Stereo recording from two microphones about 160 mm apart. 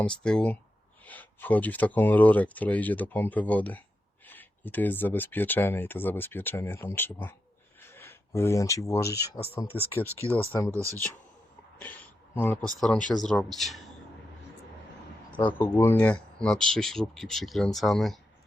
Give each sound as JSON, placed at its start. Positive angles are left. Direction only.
{"t": 0.0, "sound": "speech", "side_deg": 5}
{"t": 10.7, "sound": "speech", "side_deg": -20}
{"t": 11.8, "sound": "a sound", "side_deg": 10}
{"t": 13.1, "sound": "speech", "side_deg": 0}
{"t": 15.3, "sound": "speech", "side_deg": 10}